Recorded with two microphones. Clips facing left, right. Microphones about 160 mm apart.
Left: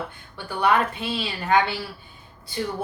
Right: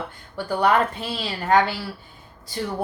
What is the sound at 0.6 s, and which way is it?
Speech, 40° right (ahead or behind).